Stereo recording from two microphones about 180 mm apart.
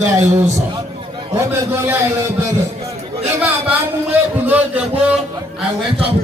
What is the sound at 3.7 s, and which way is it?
A man's voice, 10° right (ahead or behind).